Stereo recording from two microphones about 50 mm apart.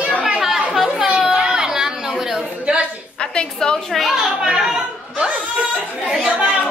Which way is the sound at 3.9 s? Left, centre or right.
Centre.